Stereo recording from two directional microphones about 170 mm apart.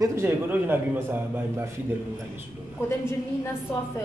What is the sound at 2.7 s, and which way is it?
A woman's voice, 15° left (ahead or behind).